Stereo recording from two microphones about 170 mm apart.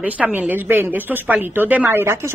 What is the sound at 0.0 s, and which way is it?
A woman's voice, 10° right (ahead or behind).